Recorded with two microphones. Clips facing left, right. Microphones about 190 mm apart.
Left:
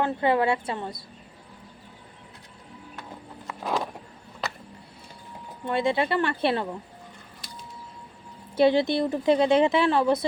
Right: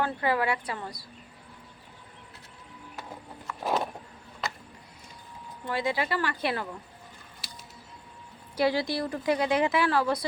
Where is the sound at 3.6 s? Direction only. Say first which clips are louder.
Even; 5° right (ahead or behind).